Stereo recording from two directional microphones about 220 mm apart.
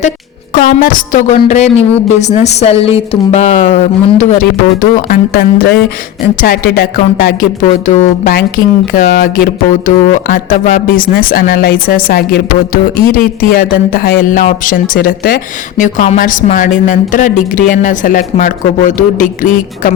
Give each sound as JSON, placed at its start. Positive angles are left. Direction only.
{"t": 0.5, "sound": "speech", "side_deg": 40}